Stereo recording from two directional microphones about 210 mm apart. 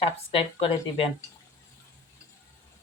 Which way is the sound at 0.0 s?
25° left (ahead or behind).